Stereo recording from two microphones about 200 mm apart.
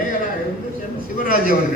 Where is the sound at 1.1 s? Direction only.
45° left (ahead or behind).